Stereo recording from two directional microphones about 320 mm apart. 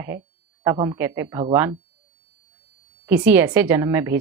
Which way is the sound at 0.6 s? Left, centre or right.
Centre.